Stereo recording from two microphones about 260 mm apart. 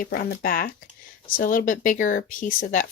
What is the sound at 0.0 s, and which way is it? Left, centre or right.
Speech, left.